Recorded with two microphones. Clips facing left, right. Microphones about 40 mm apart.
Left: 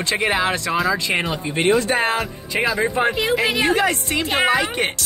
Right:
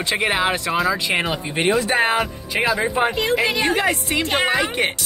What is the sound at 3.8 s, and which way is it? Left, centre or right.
Speech, centre.